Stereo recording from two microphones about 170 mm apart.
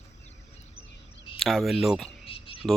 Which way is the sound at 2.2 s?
35° left (ahead or behind).